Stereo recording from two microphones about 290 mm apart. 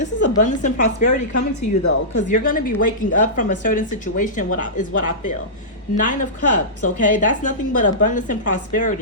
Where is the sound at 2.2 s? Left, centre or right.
Left.